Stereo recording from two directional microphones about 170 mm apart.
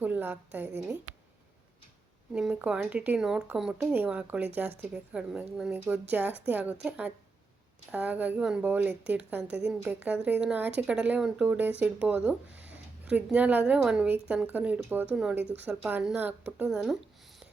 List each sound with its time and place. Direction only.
0.0 s a woman's voice: 10° right (ahead or behind)
2.3 s a woman's voice: 5° right (ahead or behind)